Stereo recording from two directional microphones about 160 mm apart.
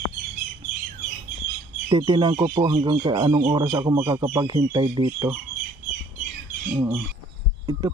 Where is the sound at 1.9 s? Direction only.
30° right (ahead or behind).